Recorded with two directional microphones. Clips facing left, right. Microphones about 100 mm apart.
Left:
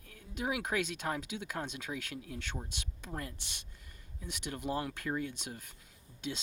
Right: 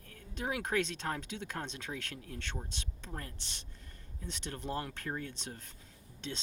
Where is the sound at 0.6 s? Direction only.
10° left (ahead or behind).